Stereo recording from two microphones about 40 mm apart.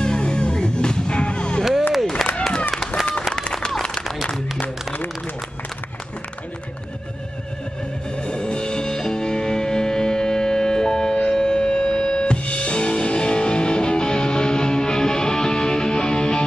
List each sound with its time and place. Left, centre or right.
0.0 s music: left
1.6 s music: centre
8.2 s music: left